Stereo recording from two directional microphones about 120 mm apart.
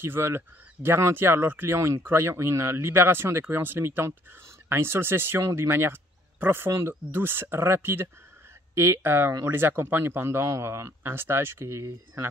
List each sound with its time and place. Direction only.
0.0 s speech: 20° right (ahead or behind)